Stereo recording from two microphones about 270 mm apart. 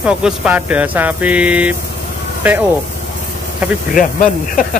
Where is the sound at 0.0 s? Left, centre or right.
Centre.